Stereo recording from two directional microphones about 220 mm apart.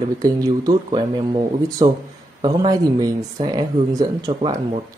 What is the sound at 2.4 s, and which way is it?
Speech, 20° right (ahead or behind).